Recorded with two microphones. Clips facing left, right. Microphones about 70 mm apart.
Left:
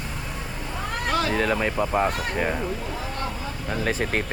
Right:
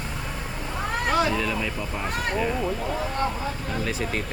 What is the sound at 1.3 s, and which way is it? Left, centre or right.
Speech, left.